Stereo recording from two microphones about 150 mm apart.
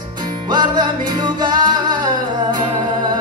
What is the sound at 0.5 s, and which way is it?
Music, 30° right (ahead or behind).